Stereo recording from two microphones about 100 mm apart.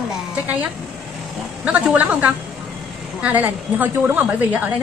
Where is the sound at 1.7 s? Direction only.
15° right (ahead or behind).